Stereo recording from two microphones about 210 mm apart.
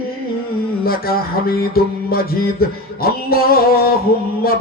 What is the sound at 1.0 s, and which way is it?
Music, 45° left (ahead or behind).